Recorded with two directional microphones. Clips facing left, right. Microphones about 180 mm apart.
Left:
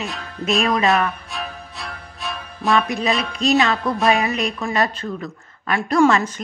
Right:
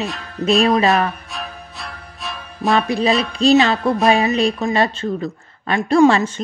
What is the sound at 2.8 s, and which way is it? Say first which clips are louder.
Music: right 4 dB; 30° right (ahead or behind).